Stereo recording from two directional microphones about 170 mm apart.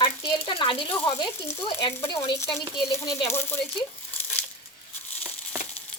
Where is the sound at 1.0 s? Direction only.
20° left (ahead or behind).